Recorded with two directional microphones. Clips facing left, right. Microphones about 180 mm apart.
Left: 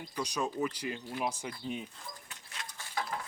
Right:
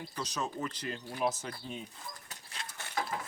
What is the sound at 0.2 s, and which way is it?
Speech, 10° left (ahead or behind).